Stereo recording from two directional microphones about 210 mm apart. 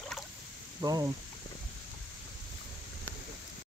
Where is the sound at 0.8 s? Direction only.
20° right (ahead or behind).